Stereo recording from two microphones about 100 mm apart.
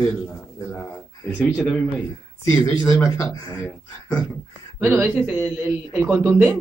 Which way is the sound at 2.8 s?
30° left (ahead or behind).